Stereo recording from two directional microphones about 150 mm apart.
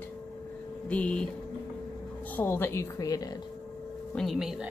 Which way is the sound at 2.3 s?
15° left (ahead or behind).